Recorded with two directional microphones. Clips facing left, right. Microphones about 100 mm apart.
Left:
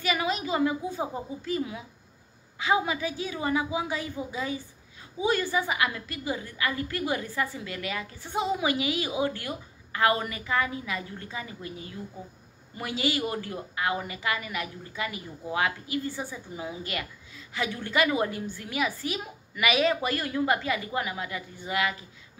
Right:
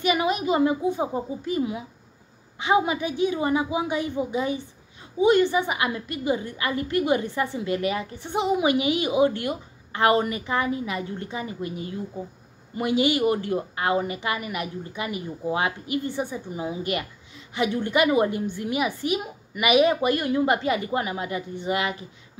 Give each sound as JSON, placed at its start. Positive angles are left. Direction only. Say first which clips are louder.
{"t": 0.0, "sound": "a woman's voice", "louder": "right 5 dB", "side_deg": -20}
{"t": 12.7, "sound": "a woman's voice", "louder": "right 7 dB", "side_deg": -20}